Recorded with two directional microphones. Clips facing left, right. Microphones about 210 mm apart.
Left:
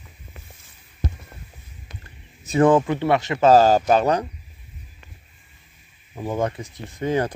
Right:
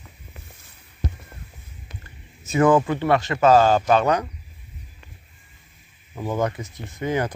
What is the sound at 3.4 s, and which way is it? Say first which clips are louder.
Speech: left 2 dB; 35° left (ahead or behind).